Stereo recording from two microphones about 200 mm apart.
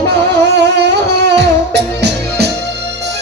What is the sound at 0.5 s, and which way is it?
Music, 55° right (ahead or behind).